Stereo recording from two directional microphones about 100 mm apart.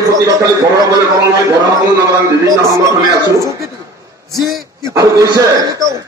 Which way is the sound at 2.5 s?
35° right (ahead or behind).